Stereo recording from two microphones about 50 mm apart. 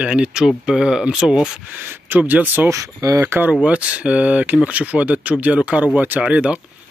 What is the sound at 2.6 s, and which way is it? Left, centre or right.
Speech, right.